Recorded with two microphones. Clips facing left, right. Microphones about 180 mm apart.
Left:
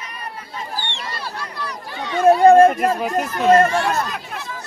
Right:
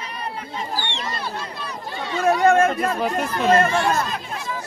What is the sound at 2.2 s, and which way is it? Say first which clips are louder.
Chatter: left 6 dB; 35° left (ahead or behind).